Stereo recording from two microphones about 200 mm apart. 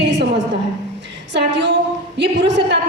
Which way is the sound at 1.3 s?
60° right (ahead or behind).